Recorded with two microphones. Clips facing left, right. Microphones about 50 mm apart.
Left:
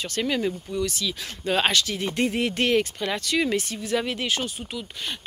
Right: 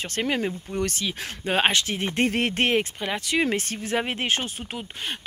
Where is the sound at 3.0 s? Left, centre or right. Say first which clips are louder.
Even; right.